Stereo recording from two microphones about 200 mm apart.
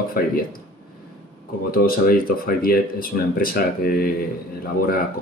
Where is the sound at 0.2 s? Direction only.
45° left (ahead or behind).